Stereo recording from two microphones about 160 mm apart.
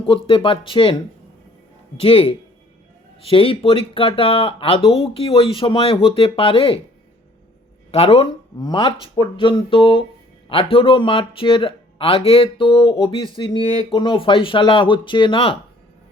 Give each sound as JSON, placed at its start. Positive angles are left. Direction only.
{"t": 0.3, "sound": "speech", "side_deg": 35}
{"t": 2.0, "sound": "speech", "side_deg": 35}
{"t": 7.9, "sound": "speech", "side_deg": 40}
{"t": 8.5, "sound": "speech", "side_deg": 25}